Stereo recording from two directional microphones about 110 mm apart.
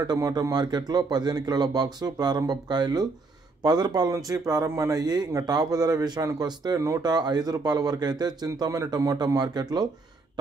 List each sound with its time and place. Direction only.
0.0 s speech: 40° right (ahead or behind)